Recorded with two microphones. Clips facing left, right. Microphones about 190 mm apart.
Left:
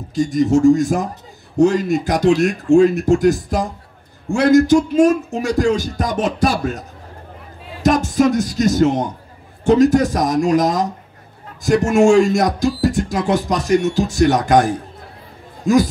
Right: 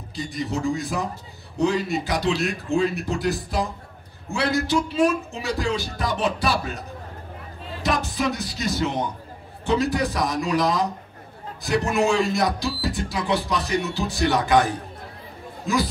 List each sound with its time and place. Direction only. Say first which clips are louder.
0.1 s music: left 13 dB; 45° left (ahead or behind)
7.8 s music: left 10 dB; 45° left (ahead or behind)
15.6 s speech: left 9 dB; 45° left (ahead or behind)